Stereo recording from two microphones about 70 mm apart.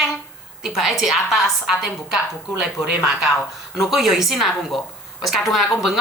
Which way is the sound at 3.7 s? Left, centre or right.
Centre.